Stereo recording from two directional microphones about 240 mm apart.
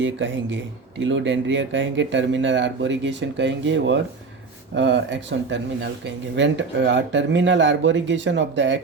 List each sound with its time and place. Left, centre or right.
0.0 s speech: right